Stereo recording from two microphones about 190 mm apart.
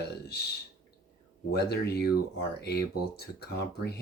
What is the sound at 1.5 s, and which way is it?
Speech, 60° left (ahead or behind).